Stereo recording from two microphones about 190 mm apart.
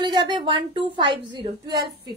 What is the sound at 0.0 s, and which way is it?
A woman's voice, 25° right (ahead or behind).